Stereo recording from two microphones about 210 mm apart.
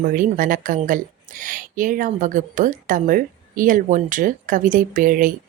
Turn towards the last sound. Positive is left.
turn(degrees=-40)  # may be behind; listen again after turning